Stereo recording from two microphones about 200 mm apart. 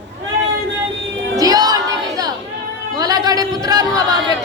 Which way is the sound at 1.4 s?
20° right (ahead or behind).